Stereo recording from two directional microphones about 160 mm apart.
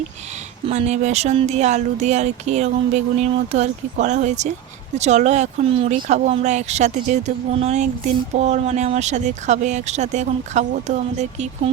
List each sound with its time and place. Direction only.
0.7 s speech: 45° right (ahead or behind)